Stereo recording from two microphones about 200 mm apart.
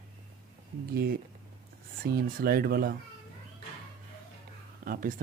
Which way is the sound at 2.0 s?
50° right (ahead or behind).